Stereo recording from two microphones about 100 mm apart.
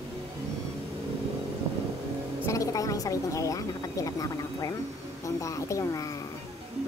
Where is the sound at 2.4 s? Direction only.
35° left (ahead or behind).